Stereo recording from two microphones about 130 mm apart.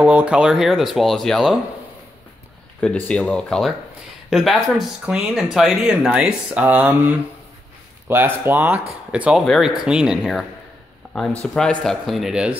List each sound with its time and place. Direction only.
0.0 s speech: 10° right (ahead or behind)
2.8 s speech: 10° left (ahead or behind)
11.4 s speech: 5° left (ahead or behind)